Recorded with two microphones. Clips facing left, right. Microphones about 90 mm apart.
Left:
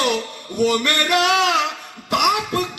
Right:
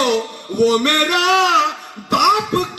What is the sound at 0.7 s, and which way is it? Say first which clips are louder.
Music: right 3 dB; 45° right (ahead or behind).